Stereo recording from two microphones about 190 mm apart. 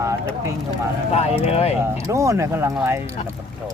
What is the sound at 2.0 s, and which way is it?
Speech, 15° right (ahead or behind).